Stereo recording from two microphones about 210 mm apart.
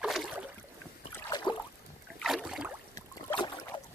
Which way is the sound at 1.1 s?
20° left (ahead or behind).